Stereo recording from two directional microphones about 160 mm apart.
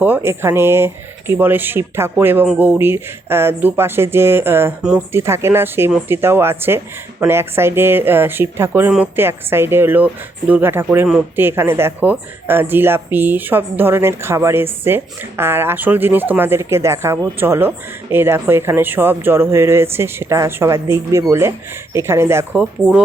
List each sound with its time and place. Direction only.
0.0 s speech: 15° right (ahead or behind)